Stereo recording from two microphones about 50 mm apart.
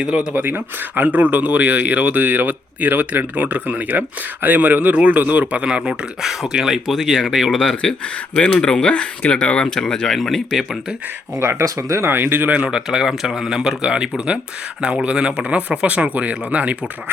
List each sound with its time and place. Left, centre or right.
0.3 s speech: right
3.3 s speech: right
5.6 s speech: centre
5.9 s speech: centre
6.9 s speech: centre
7.8 s speech: centre
8.7 s speech: left; by 10.8 s centre
11.3 s speech: right
12.1 s speech: right
12.6 s speech: centre